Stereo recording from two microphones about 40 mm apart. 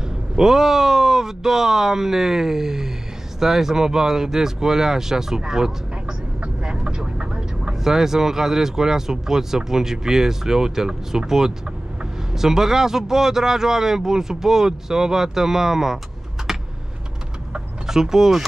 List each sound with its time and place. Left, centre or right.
0.4 s speech: centre
6.4 s vehicle: right
7.8 s speech: centre
16.5 s typing: centre
17.8 s speech: centre